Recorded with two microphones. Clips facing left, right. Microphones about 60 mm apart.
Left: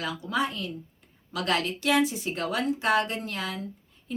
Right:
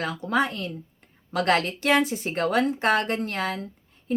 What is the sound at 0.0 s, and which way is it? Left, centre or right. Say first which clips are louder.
Speech: right 4 dB; right.